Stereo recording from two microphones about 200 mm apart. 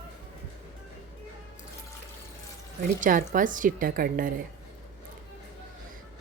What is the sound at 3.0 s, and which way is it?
A woman's voice, 40° right (ahead or behind).